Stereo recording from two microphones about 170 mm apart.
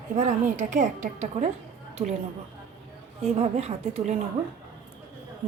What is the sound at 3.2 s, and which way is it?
Speech, 35° right (ahead or behind).